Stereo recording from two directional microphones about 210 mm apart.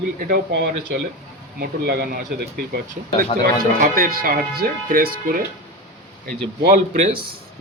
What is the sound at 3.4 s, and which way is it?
Speech, 45° right (ahead or behind).